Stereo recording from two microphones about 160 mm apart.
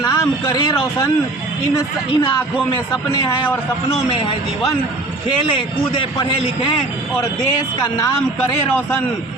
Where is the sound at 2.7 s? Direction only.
20° left (ahead or behind).